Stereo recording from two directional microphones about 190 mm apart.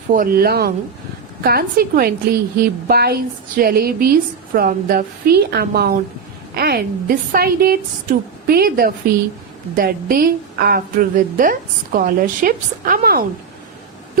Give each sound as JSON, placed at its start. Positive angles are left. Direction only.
{"t": 0.1, "sound": "a woman's voice", "side_deg": -45}